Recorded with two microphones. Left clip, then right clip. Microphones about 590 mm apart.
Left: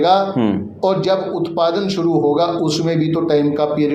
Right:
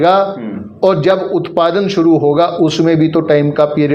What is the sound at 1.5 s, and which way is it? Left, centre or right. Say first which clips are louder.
A man's voice: right 5 dB; right.